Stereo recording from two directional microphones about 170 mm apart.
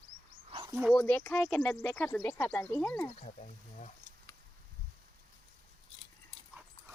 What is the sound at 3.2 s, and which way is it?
Speech, 45° left (ahead or behind).